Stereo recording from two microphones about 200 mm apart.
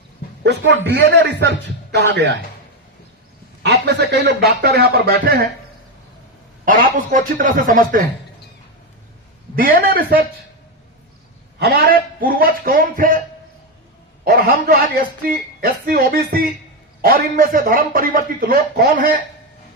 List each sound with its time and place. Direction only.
0.4 s a man's voice: 60° right (ahead or behind)
3.6 s a man's voice: 60° right (ahead or behind)
6.7 s a man's voice: 45° right (ahead or behind)
9.6 s a man's voice: 45° right (ahead or behind)
11.6 s a man's voice: 50° right (ahead or behind)
14.3 s a man's voice: 45° right (ahead or behind)